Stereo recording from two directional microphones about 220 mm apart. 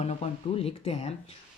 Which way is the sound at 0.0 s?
30° left (ahead or behind).